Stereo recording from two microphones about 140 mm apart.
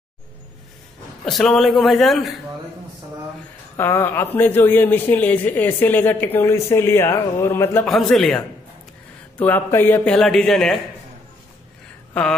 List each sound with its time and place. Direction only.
1.2 s a man's voice: 5° left (ahead or behind)
3.7 s a man's voice: 15° left (ahead or behind)
7.8 s a man's voice: centre (ahead or behind)
9.4 s a man's voice: 15° left (ahead or behind)
12.1 s speech: 10° left (ahead or behind)